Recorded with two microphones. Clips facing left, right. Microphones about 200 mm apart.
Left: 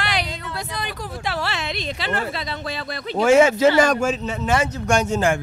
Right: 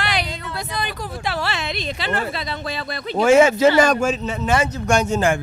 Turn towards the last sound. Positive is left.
turn(degrees=-15)  # may be behind; listen again after turning